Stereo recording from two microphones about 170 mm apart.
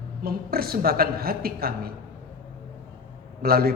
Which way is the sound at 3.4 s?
60° right (ahead or behind).